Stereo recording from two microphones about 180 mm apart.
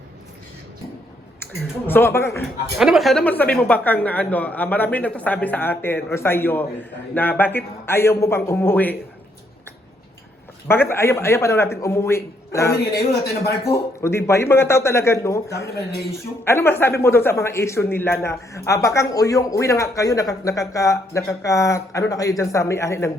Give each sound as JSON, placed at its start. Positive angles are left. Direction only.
{"t": 1.9, "sound": "a man's voice", "side_deg": 10}
{"t": 2.4, "sound": "a man's voice", "side_deg": 0}
{"t": 10.7, "sound": "a man's voice", "side_deg": 15}
{"t": 13.0, "sound": "speech", "side_deg": 60}
{"t": 13.7, "sound": "a man's voice", "side_deg": 15}